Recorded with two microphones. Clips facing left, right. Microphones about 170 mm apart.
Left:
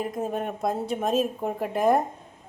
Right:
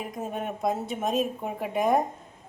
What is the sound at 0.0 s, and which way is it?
Speech, centre (ahead or behind).